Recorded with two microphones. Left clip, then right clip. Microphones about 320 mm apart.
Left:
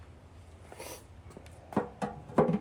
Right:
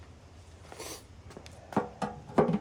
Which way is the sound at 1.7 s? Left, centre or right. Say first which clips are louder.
Right 1 dB; centre.